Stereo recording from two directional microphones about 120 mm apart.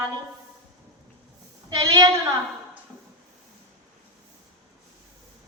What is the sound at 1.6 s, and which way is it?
Speech, 35° right (ahead or behind).